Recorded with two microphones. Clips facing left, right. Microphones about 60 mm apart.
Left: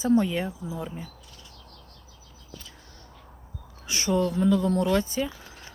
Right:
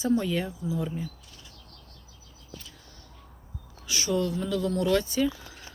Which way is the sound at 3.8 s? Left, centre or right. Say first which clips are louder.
Left 2 dB; left.